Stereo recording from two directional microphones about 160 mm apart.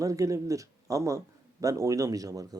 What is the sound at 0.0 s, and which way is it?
Speech, 20° right (ahead or behind).